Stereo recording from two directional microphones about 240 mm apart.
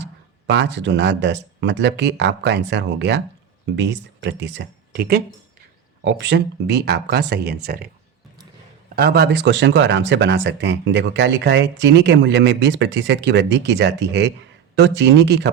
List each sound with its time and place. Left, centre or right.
0.0 s speech: right
9.0 s speech: right